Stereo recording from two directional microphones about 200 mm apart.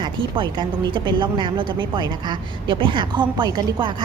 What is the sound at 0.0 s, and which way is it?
A woman's voice, 25° right (ahead or behind).